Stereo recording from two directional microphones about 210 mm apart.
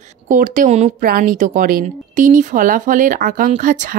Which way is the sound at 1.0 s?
40° right (ahead or behind).